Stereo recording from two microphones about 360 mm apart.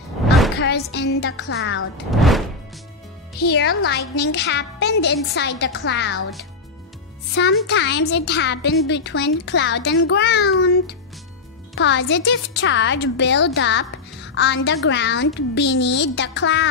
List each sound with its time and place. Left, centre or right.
0.6 s a woman's voice: left
2.0 s speech: centre
3.3 s a woman's voice: left
7.6 s a woman's voice: left
11.7 s a woman's voice: left